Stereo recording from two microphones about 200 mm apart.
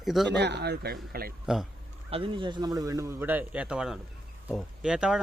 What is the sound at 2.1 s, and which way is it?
A man's voice, 25° right (ahead or behind).